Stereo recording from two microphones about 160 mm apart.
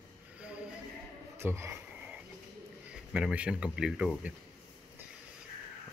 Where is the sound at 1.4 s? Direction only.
15° right (ahead or behind).